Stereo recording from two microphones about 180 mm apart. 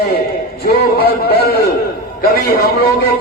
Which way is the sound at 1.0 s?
60° left (ahead or behind).